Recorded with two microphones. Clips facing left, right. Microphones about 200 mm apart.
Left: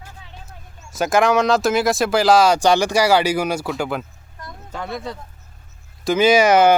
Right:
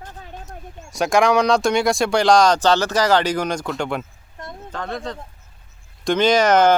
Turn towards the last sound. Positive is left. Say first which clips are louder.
# left 2 dB
turn(degrees=10)  # may be behind; listen again after turning